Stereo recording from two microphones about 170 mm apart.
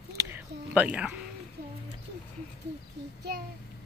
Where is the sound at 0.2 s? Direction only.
10° right (ahead or behind).